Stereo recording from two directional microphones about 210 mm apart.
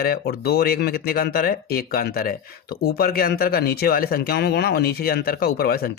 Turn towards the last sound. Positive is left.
turn(degrees=45)  # may be behind; listen again after turning